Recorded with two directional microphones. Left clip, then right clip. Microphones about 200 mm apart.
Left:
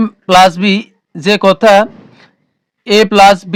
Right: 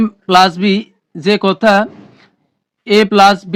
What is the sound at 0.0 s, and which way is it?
Speech, 35° left (ahead or behind).